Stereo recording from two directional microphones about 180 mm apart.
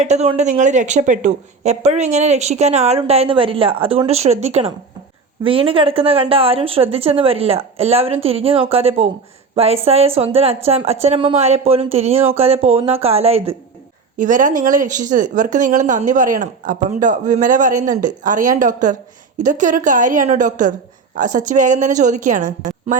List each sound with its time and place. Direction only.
0.0 s speech: 40° right (ahead or behind)
14.2 s speech: 45° right (ahead or behind)